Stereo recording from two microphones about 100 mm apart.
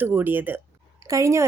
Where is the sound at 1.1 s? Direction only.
30° right (ahead or behind).